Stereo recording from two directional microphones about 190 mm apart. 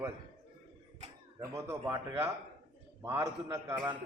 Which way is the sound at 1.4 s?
15° right (ahead or behind).